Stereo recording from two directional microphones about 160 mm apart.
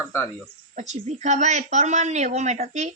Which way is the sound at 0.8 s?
45° right (ahead or behind).